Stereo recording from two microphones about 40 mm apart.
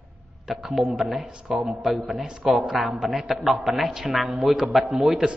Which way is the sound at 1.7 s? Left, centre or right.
Centre.